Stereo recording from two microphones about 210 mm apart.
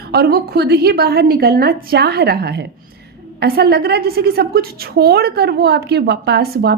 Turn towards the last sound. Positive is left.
turn(degrees=-50)  # may be behind; listen again after turning